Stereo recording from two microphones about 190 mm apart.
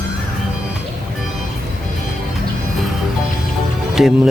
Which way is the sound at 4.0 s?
Centre (ahead or behind).